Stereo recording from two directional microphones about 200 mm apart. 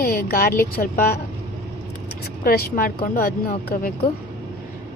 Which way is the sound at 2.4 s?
50° left (ahead or behind).